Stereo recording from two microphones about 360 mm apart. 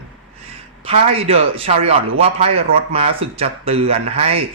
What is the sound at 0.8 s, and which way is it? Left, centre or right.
A man's voice, centre.